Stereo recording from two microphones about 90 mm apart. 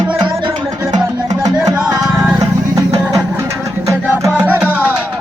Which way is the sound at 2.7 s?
35° right (ahead or behind).